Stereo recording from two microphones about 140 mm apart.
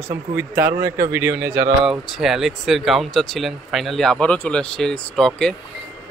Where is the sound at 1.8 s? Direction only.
Centre (ahead or behind).